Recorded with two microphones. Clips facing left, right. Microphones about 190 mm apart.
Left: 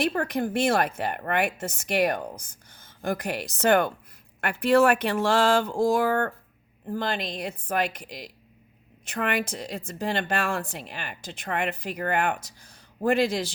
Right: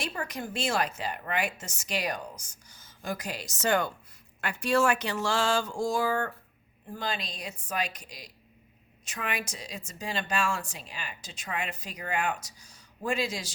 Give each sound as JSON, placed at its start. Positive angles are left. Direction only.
{"t": 0.0, "sound": "a woman's voice", "side_deg": 55}
{"t": 9.0, "sound": "a woman's voice", "side_deg": 55}